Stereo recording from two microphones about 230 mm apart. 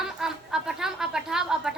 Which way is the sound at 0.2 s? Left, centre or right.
Centre.